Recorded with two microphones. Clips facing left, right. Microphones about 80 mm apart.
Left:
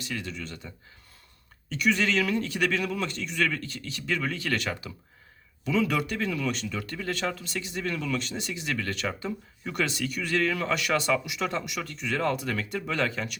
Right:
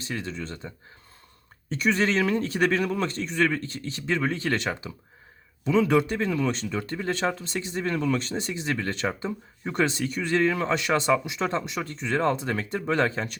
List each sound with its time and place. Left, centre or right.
0.0 s a man's voice: right
1.7 s a man's voice: right